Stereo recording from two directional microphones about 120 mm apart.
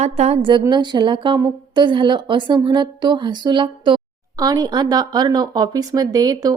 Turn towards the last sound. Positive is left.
turn(degrees=-30)  # may be behind; listen again after turning